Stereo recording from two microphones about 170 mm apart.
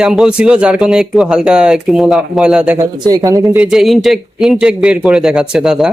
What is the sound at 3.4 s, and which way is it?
Speech, 5° right (ahead or behind).